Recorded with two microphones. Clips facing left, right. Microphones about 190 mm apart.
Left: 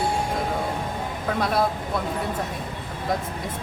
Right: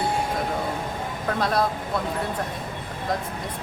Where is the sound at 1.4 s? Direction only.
Centre (ahead or behind).